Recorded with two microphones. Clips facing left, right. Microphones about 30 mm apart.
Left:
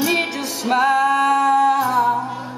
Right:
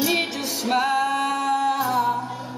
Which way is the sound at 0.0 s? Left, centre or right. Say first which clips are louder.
Left 3 dB; centre.